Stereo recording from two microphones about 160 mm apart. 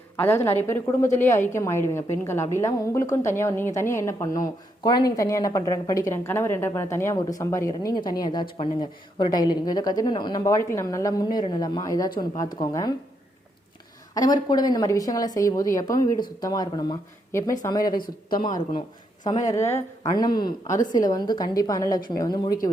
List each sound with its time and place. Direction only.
0.2 s a woman's voice: 15° left (ahead or behind)
14.1 s a woman's voice: 25° left (ahead or behind)
18.0 s speech: 60° left (ahead or behind)
19.5 s a woman's voice: 15° left (ahead or behind)